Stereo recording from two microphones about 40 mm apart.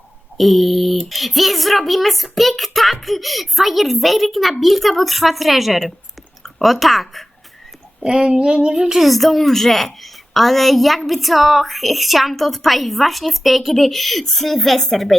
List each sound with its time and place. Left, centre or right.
0.3 s a woman's voice: centre
8.0 s speech: centre
8.7 s speech: centre
9.0 s a woman's voice: centre